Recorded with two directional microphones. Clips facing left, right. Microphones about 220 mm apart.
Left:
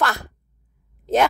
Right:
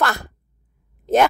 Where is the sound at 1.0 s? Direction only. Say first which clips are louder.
Right 2 dB; 50° right (ahead or behind).